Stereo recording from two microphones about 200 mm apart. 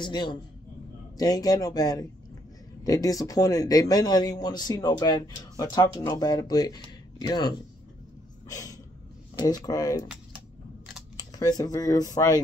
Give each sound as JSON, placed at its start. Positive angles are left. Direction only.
{"t": 0.0, "sound": "a man's voice", "side_deg": 20}
{"t": 8.5, "sound": "a sound", "side_deg": 15}
{"t": 9.4, "sound": "a man's voice", "side_deg": 20}
{"t": 11.1, "sound": "speech", "side_deg": 20}